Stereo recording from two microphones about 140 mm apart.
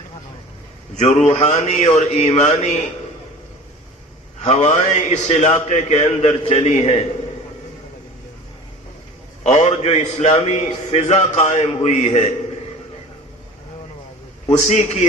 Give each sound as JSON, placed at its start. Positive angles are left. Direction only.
{"t": 0.9, "sound": "a man's voice", "side_deg": 50}
{"t": 4.4, "sound": "a man's voice", "side_deg": 55}
{"t": 9.4, "sound": "a man's voice", "side_deg": 50}
{"t": 14.5, "sound": "a man's voice", "side_deg": 55}